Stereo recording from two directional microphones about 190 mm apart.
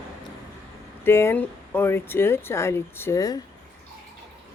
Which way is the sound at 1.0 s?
15° left (ahead or behind).